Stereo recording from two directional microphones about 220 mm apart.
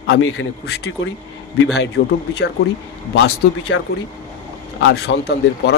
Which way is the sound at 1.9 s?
50° left (ahead or behind).